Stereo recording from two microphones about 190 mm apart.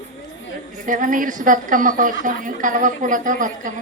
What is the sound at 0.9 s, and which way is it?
A woman's voice, 45° right (ahead or behind).